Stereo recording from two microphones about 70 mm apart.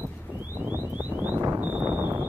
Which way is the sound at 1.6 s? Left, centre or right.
Right.